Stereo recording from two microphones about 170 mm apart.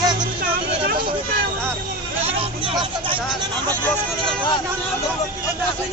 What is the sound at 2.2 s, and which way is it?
Speech, 30° right (ahead or behind).